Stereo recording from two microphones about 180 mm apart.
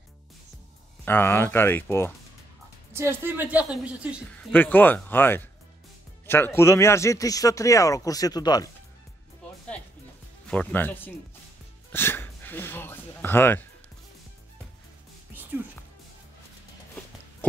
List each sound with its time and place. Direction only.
1.0 s speech: 10° left (ahead or behind)
2.9 s a woman's voice: 15° right (ahead or behind)
4.4 s speech: 10° left (ahead or behind)
10.4 s speech: 5° left (ahead or behind)
11.9 s a sound: 10° left (ahead or behind)